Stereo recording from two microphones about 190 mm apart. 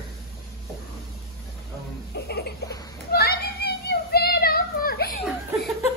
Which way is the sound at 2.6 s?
20° left (ahead or behind).